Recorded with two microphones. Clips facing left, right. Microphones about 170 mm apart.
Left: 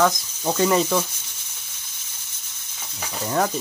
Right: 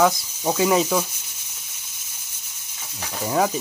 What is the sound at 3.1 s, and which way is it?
Speech, 10° right (ahead or behind).